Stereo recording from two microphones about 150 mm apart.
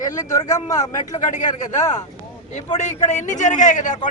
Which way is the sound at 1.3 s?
55° left (ahead or behind).